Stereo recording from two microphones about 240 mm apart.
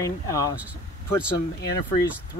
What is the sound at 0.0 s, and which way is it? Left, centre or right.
Speech, centre.